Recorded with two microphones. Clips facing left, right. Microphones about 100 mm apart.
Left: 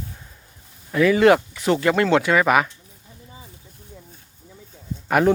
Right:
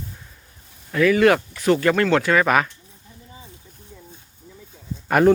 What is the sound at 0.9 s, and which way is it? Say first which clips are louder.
Speech: left 1 dB; 20° left (ahead or behind).